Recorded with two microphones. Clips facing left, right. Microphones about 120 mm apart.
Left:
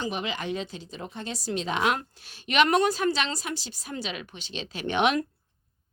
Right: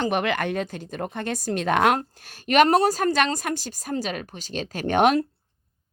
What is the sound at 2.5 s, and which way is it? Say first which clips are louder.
A woman's voice: right 4 dB; 40° right (ahead or behind).